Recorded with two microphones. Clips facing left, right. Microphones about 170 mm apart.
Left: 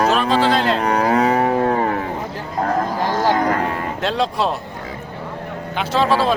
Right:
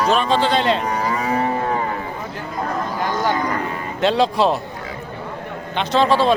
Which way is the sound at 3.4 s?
75° left (ahead or behind).